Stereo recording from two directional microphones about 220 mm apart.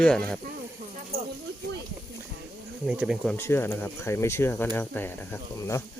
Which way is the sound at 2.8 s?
5° right (ahead or behind).